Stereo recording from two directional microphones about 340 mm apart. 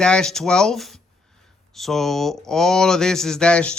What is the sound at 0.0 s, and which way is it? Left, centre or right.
Speech, centre.